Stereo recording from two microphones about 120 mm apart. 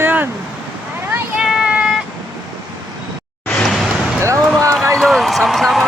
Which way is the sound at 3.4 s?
5° left (ahead or behind).